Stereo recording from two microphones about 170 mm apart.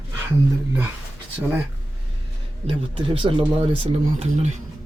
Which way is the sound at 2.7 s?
30° right (ahead or behind).